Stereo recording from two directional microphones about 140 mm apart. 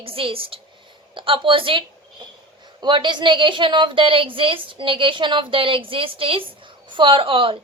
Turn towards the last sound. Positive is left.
turn(degrees=-40)  # may be behind; listen again after turning